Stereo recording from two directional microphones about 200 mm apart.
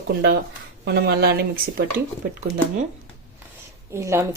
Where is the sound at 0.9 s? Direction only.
55° right (ahead or behind).